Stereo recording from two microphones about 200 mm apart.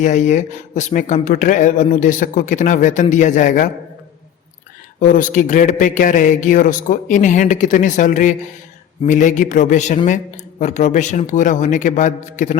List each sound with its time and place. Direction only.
0.0 s speech: 35° left (ahead or behind)
4.9 s speech: 40° left (ahead or behind)